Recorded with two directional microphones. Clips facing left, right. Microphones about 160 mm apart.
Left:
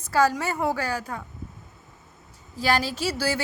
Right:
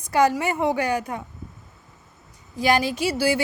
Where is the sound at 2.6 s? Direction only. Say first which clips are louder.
Right 4 dB; 15° right (ahead or behind).